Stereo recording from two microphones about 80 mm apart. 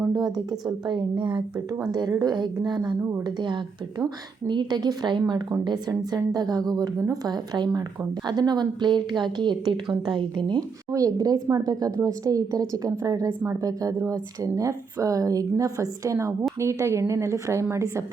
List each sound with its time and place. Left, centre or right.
0.0 s a sound: right
1.9 s a woman's voice: right
10.9 s a woman's voice: right